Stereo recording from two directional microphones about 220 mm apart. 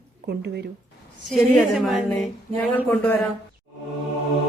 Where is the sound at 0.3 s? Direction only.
50° right (ahead or behind).